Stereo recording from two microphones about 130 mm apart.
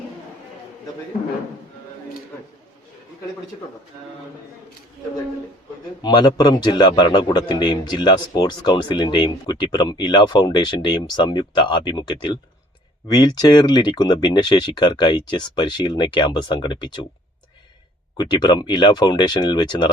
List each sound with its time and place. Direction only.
6.0 s a man's voice: 35° left (ahead or behind)
18.2 s a man's voice: 35° left (ahead or behind)